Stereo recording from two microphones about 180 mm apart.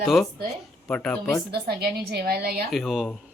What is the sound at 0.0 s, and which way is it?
Speech, centre (ahead or behind).